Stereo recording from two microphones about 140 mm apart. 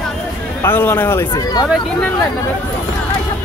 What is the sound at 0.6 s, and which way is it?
Speech, 15° left (ahead or behind).